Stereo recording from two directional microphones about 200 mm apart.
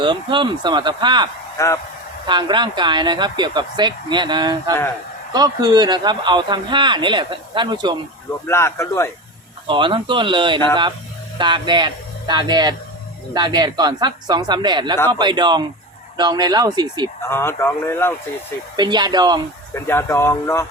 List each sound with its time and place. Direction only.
0.0 s speech: 25° right (ahead or behind)
1.5 s speech: 15° left (ahead or behind)
2.2 s speech: 25° right (ahead or behind)
8.4 s speech: 15° left (ahead or behind)
9.6 s speech: 25° right (ahead or behind)
17.2 s speech: 10° left (ahead or behind)
18.8 s speech: 20° right (ahead or behind)
19.7 s speech: 10° left (ahead or behind)